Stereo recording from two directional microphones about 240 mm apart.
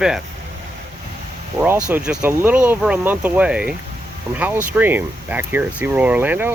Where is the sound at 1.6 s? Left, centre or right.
Centre.